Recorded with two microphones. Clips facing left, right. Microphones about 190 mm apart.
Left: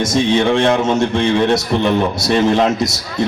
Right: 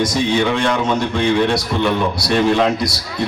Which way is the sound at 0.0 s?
25° left (ahead or behind).